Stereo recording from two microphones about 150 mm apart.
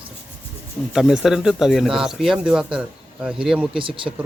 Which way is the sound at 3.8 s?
35° right (ahead or behind).